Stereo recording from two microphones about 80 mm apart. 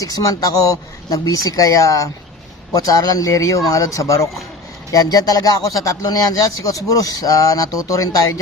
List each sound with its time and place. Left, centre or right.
0.0 s a man's voice: left
4.9 s a man's voice: left